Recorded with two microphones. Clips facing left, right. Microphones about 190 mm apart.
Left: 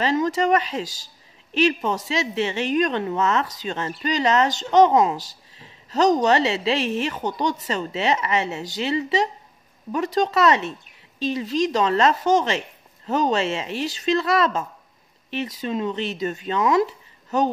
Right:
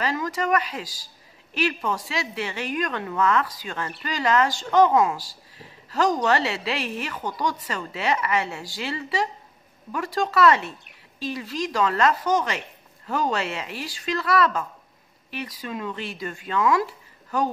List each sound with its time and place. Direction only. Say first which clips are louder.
0.0 s speech: left 5 dB; 25° left (ahead or behind)